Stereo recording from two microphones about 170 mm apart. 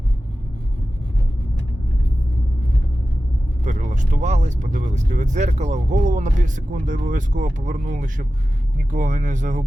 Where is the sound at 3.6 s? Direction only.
45° right (ahead or behind).